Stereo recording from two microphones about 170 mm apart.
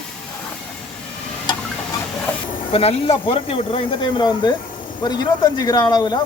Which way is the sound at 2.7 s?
35° left (ahead or behind).